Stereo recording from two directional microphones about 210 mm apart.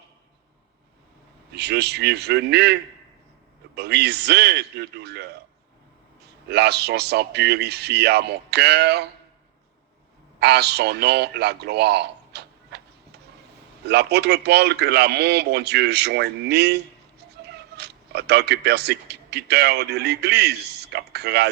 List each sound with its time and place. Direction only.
1.5 s speech: 50° right (ahead or behind)
3.8 s speech: 50° right (ahead or behind)
6.5 s speech: 50° right (ahead or behind)
10.4 s a man's voice: 50° right (ahead or behind)